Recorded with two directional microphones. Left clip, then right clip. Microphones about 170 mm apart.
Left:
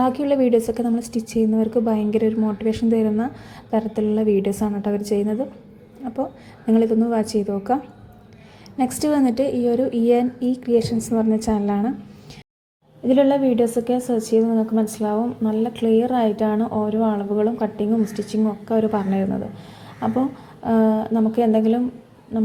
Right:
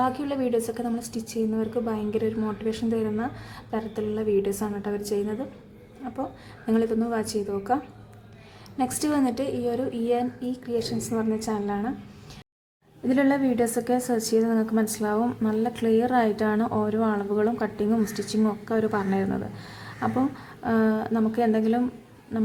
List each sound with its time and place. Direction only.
0.0 s a woman's voice: 20° left (ahead or behind)
8.8 s a woman's voice: 15° left (ahead or behind)
13.1 s a woman's voice: 5° left (ahead or behind)
20.7 s a woman's voice: 10° left (ahead or behind)